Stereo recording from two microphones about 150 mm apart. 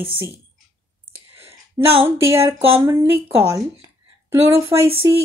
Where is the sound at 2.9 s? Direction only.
15° right (ahead or behind).